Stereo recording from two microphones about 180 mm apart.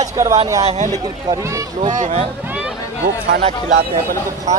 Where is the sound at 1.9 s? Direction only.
40° right (ahead or behind).